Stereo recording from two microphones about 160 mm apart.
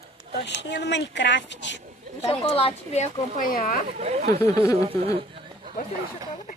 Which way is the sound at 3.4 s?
65° left (ahead or behind).